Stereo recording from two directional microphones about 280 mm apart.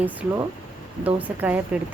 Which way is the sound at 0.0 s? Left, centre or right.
Centre.